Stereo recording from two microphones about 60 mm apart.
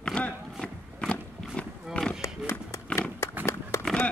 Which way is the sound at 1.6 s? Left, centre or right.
Centre.